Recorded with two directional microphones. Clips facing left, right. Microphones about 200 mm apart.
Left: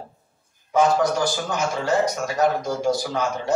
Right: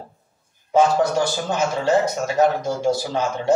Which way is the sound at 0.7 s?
25° right (ahead or behind).